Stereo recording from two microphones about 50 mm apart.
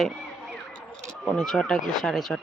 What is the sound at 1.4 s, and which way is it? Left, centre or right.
Speech, centre.